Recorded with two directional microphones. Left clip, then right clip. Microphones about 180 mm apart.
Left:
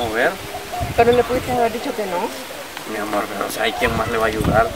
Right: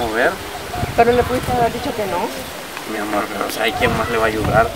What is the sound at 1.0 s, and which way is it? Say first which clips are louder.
Speech: right 1 dB; 5° right (ahead or behind).